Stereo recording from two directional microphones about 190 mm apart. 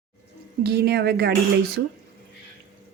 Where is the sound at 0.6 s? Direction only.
55° right (ahead or behind).